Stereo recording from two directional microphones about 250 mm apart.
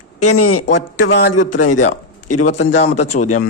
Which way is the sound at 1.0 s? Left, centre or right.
Left.